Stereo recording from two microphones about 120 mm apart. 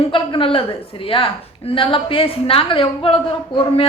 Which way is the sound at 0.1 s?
45° left (ahead or behind).